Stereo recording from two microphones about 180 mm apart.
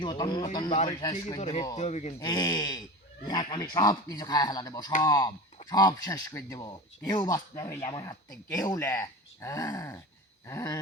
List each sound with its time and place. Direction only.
0.0 s speech: 25° left (ahead or behind)
1.4 s speech: 35° left (ahead or behind)
2.1 s speech: 20° left (ahead or behind)
10.4 s a sound: 15° left (ahead or behind)